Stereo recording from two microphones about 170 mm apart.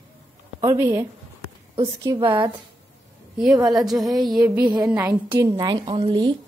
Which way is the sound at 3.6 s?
Centre (ahead or behind).